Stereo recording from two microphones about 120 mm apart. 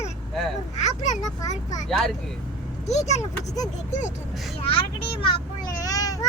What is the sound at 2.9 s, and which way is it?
Speech, 70° left (ahead or behind).